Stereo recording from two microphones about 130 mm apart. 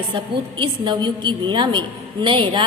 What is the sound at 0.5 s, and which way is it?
A woman's voice, 40° right (ahead or behind).